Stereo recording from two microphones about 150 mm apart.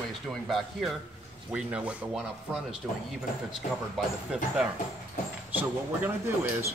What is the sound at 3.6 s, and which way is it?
Speech, 60° left (ahead or behind).